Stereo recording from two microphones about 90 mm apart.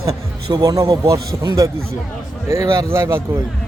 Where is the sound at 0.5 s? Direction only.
45° right (ahead or behind).